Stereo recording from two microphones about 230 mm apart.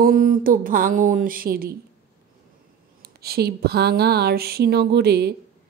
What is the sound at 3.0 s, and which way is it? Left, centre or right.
Speech, right.